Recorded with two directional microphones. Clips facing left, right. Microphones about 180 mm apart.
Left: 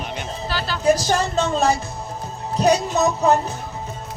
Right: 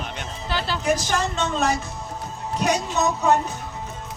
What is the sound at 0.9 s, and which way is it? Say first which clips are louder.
Speech: left 4 dB; 40° left (ahead or behind).